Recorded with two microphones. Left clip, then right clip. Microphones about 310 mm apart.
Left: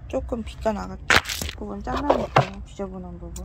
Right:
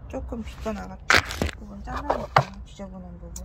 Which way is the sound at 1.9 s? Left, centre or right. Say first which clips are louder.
Left 2 dB; left.